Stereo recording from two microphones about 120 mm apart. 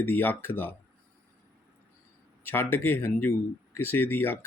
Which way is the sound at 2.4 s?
20° left (ahead or behind).